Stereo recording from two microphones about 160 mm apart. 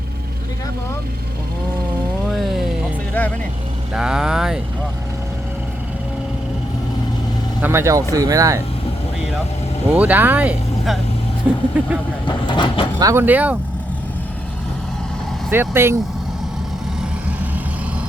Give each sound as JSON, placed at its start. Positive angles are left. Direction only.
{"t": 2.3, "sound": "music", "side_deg": 0}
{"t": 3.2, "sound": "vehicle", "side_deg": 10}
{"t": 3.9, "sound": "speech", "side_deg": -5}
{"t": 7.6, "sound": "speech", "side_deg": -15}
{"t": 9.9, "sound": "speech", "side_deg": -10}
{"t": 12.5, "sound": "speech", "side_deg": 30}
{"t": 13.0, "sound": "speech", "side_deg": -20}
{"t": 15.4, "sound": "speech", "side_deg": -15}
{"t": 17.0, "sound": "vehicle", "side_deg": -10}